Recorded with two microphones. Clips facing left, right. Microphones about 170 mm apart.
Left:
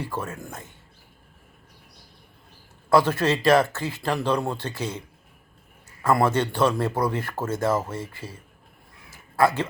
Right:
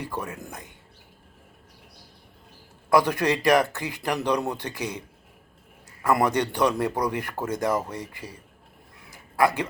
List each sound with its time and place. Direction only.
0.0 s speech: 15° right (ahead or behind)
2.9 s speech: 15° right (ahead or behind)
9.0 s crow: 15° right (ahead or behind)